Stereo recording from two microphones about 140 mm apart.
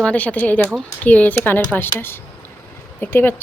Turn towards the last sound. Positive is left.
turn(degrees=15)  # may be behind; listen again after turning